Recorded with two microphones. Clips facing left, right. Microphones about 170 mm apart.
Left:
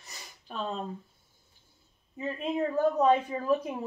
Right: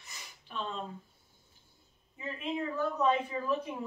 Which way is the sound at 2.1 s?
40° left (ahead or behind).